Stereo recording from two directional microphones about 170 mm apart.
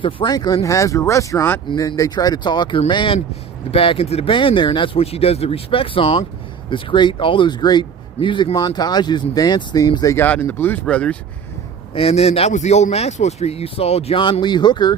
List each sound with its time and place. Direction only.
0.0 s speech: 25° left (ahead or behind); by 11.2 s 5° left (ahead or behind)
11.9 s speech: 35° left (ahead or behind)